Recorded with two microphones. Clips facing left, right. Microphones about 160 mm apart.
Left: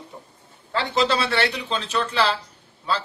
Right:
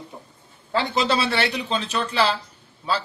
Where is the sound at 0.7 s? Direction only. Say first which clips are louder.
Even; 15° right (ahead or behind).